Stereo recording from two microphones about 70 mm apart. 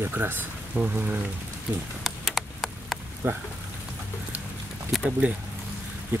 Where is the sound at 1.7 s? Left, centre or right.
Right.